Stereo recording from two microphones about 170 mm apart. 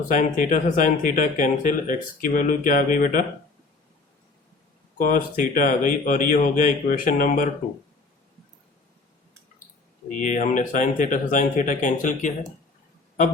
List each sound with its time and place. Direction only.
0.1 s speech: 50° left (ahead or behind)
4.9 s speech: 55° left (ahead or behind)
10.1 s speech: 45° left (ahead or behind)